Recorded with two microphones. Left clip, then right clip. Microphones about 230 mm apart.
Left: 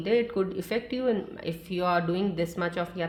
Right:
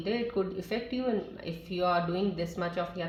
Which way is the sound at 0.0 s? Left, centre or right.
Left.